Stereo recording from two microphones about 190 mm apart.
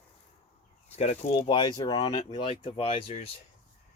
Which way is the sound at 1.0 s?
35° left (ahead or behind).